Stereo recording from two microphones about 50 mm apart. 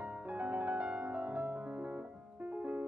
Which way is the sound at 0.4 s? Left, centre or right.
Right.